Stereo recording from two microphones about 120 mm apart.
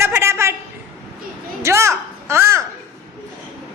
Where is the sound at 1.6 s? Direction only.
25° right (ahead or behind).